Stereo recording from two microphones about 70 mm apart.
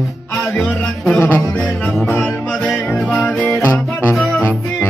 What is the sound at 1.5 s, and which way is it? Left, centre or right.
Music, centre.